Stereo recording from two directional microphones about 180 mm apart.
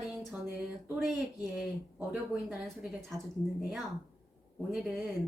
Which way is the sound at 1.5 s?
5° right (ahead or behind).